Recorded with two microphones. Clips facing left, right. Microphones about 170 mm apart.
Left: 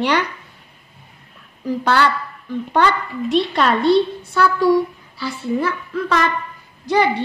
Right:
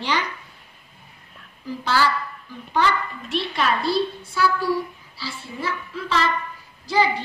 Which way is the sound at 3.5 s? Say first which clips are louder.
Left 6 dB; 65° left (ahead or behind).